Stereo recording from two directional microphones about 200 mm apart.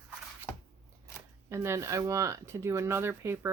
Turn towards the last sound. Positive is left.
turn(degrees=-10)  # may be behind; listen again after turning